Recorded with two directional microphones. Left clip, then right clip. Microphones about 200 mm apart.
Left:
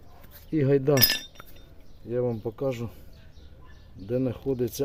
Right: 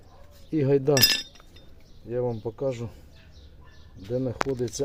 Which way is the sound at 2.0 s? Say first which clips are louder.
Even; 20° left (ahead or behind).